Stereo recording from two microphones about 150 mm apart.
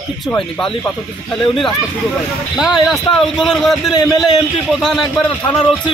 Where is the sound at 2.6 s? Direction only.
Centre (ahead or behind).